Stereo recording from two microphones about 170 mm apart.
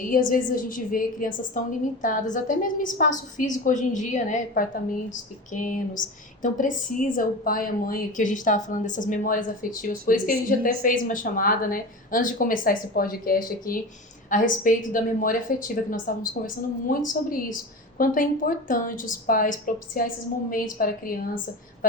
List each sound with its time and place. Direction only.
0.0 s a woman's voice: 55° left (ahead or behind)